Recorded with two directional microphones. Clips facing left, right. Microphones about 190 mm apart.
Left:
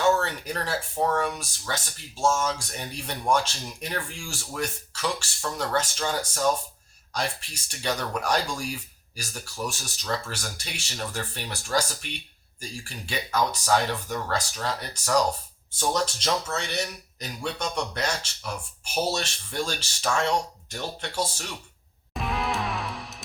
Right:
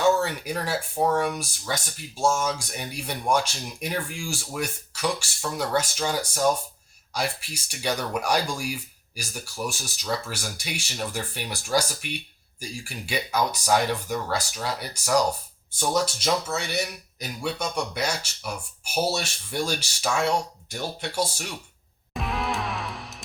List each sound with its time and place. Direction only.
0.0 s speech: 10° right (ahead or behind)
22.1 s music: centre (ahead or behind)